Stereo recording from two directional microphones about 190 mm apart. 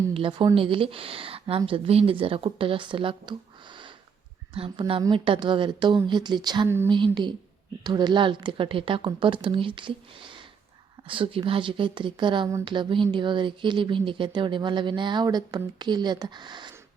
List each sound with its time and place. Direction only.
0.1 s speech: 25° right (ahead or behind)